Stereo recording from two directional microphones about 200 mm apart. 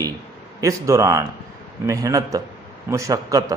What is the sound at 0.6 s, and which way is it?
A man's voice, 15° right (ahead or behind).